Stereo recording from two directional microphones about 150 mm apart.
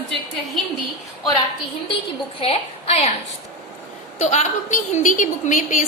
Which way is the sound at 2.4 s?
40° left (ahead or behind).